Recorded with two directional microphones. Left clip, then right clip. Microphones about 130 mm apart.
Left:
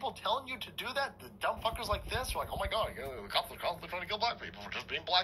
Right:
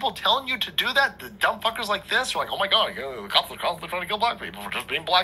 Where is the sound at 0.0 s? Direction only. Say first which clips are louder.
Right 12 dB; 20° right (ahead or behind).